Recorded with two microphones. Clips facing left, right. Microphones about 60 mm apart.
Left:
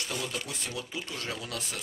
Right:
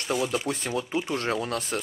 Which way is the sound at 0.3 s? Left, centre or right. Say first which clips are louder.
Right 9 dB; right.